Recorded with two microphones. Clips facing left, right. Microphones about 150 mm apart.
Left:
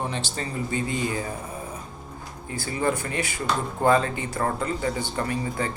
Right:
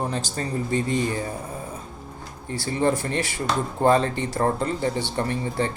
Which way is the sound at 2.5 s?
30° right (ahead or behind).